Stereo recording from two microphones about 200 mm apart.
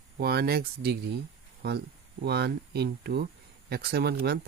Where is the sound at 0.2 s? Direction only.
50° right (ahead or behind).